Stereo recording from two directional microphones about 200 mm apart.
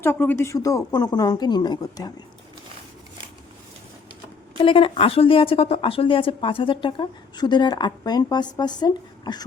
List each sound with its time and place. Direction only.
0.0 s a woman's voice: 10° left (ahead or behind)
4.6 s a woman's voice: 25° left (ahead or behind)